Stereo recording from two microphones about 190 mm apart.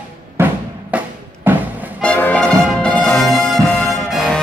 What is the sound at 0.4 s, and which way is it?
Music, 15° right (ahead or behind).